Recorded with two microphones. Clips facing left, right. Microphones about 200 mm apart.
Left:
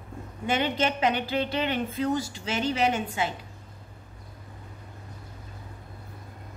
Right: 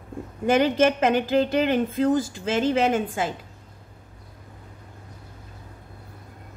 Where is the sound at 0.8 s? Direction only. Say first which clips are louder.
Right 6 dB; 45° right (ahead or behind).